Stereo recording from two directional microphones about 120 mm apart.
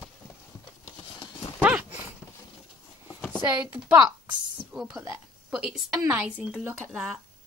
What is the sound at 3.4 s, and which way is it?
A woman's voice, 15° right (ahead or behind).